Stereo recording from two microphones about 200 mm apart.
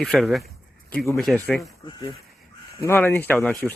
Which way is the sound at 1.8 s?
25° left (ahead or behind).